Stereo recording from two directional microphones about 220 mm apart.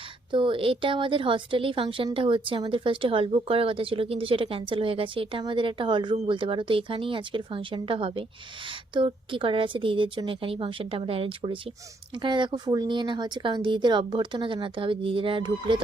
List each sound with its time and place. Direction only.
0.3 s a woman's voice: 20° right (ahead or behind)